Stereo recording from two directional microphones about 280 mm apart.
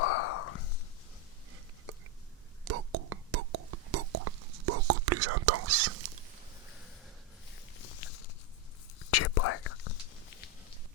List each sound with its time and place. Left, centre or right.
0.0 s a sound: left
2.6 s whispering: right
9.0 s whispering: left